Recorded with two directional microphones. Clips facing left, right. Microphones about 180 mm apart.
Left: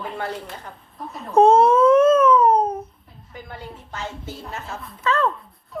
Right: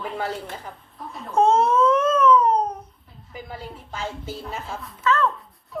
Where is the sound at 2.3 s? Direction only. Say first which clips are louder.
Left 2 dB; 55° left (ahead or behind).